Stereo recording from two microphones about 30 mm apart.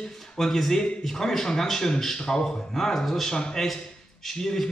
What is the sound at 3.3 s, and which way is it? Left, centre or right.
A man's voice, centre.